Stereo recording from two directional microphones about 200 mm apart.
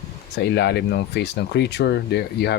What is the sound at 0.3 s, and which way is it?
Speech, 55° left (ahead or behind).